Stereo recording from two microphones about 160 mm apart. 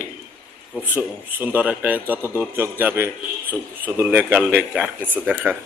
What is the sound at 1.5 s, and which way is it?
A man's voice, 10° right (ahead or behind).